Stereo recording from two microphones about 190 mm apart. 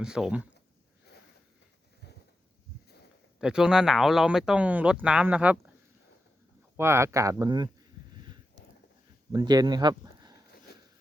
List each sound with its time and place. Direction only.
0.0 s speech: 5° right (ahead or behind)
3.4 s speech: 5° right (ahead or behind)
6.7 s speech: 15° right (ahead or behind)
9.3 s speech: 20° right (ahead or behind)